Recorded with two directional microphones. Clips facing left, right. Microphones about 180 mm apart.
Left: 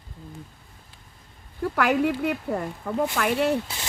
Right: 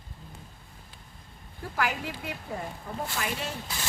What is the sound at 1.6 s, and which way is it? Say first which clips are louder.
Speech: left 9 dB; 65° left (ahead or behind).